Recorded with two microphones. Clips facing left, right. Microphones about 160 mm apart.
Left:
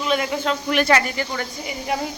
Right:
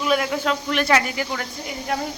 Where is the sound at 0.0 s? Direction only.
5° right (ahead or behind).